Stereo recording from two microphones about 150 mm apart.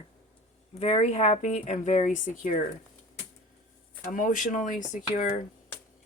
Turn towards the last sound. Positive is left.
turn(degrees=50)  # may be behind; listen again after turning